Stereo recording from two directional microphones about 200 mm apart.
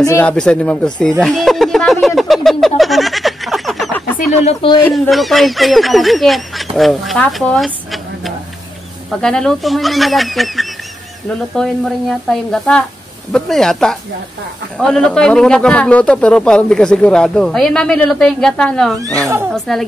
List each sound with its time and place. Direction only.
0.0 s a man's voice: 10° left (ahead or behind)
1.2 s a sound: centre (ahead or behind)
4.3 s speech: 30° left (ahead or behind)
4.8 s a man's voice: 5° left (ahead or behind)
18.9 s speech: 15° right (ahead or behind)
19.7 s a man's voice: centre (ahead or behind)